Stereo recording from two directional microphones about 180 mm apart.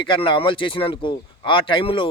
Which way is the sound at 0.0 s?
30° left (ahead or behind).